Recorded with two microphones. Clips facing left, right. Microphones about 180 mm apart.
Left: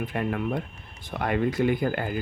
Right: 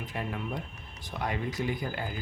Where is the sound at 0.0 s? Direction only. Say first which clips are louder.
Left 8 dB; 60° left (ahead or behind).